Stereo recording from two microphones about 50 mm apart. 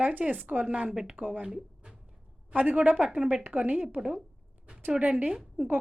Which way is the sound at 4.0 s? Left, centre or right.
Centre.